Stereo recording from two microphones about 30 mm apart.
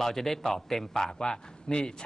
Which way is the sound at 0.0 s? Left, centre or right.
Centre.